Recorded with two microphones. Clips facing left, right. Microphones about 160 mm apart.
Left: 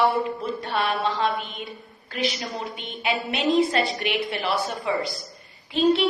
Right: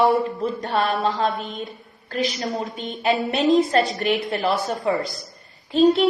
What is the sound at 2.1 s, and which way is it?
A woman's voice, 40° right (ahead or behind).